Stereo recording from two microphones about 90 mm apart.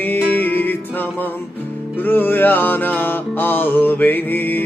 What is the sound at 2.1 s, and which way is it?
Music, 20° left (ahead or behind).